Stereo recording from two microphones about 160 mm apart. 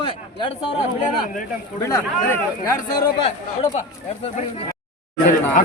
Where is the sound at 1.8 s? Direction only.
20° left (ahead or behind).